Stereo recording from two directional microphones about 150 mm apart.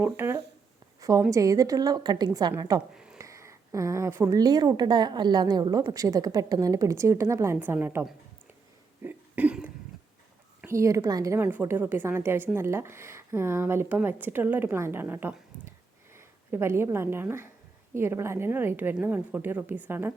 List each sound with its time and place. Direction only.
0.0 s a woman's voice: 15° right (ahead or behind)
2.9 s a sound: 5° right (ahead or behind)
3.2 s a woman's voice: 20° right (ahead or behind)
9.0 s cough: 10° right (ahead or behind)
10.7 s speech: 20° right (ahead or behind)